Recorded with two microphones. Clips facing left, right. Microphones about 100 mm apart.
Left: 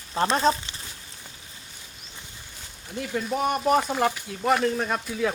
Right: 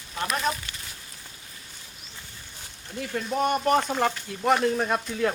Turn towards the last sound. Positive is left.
turn(degrees=0)  # may be behind; listen again after turning